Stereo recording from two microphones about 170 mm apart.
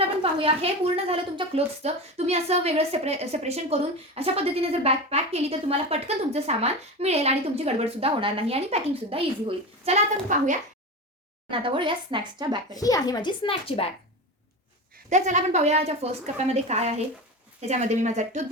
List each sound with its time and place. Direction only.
0.0 s a woman's voice: 35° right (ahead or behind)
11.5 s a woman's voice: 30° right (ahead or behind)
12.7 s speech: 20° left (ahead or behind)
15.1 s a woman's voice: 45° right (ahead or behind)